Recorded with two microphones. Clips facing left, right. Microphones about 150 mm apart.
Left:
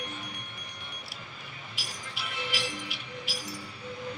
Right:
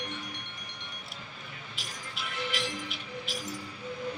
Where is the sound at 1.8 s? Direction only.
5° left (ahead or behind).